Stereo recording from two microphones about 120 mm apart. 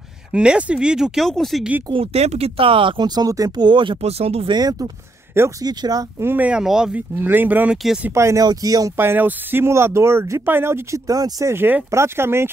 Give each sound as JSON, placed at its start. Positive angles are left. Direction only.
{"t": 0.3, "sound": "speech", "side_deg": -10}
{"t": 1.9, "sound": "speech", "side_deg": -55}
{"t": 4.0, "sound": "speech", "side_deg": -60}
{"t": 4.5, "sound": "speech", "side_deg": -35}
{"t": 5.3, "sound": "speech", "side_deg": -20}
{"t": 5.7, "sound": "speech", "side_deg": -35}
{"t": 6.2, "sound": "speech", "side_deg": -15}
{"t": 7.2, "sound": "speech", "side_deg": -15}
{"t": 7.7, "sound": "speech", "side_deg": -5}
{"t": 8.1, "sound": "speech", "side_deg": -25}
{"t": 8.9, "sound": "speech", "side_deg": -20}